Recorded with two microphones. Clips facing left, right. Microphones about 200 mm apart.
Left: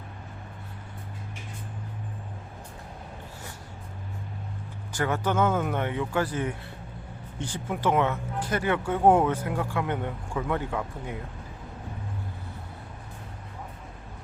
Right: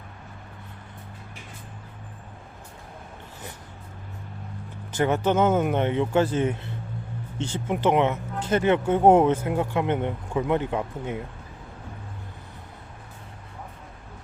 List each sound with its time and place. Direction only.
4.9 s speech: 20° right (ahead or behind)